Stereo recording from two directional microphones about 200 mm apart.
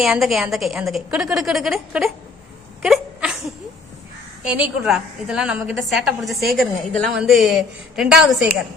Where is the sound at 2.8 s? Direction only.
Centre (ahead or behind).